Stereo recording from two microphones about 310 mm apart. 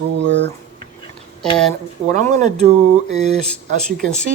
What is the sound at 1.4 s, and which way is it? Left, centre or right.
Speech, centre.